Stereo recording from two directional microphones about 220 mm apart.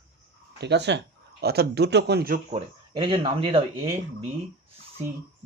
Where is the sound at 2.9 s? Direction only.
25° right (ahead or behind).